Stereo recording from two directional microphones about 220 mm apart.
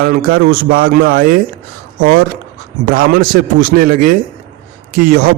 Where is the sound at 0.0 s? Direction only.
40° right (ahead or behind).